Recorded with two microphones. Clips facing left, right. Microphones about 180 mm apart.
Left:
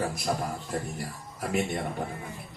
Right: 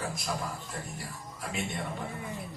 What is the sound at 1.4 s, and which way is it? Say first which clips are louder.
Speech: left 7 dB; 55° left (ahead or behind).